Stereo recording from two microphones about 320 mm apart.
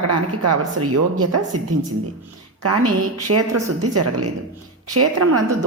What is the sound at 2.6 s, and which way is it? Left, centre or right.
A woman's voice, right.